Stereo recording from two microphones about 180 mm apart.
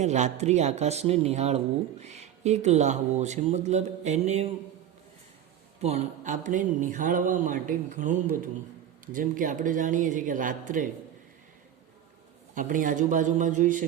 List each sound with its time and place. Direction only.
0.0 s speech: 40° right (ahead or behind)
5.8 s speech: 35° right (ahead or behind)
12.5 s speech: 45° right (ahead or behind)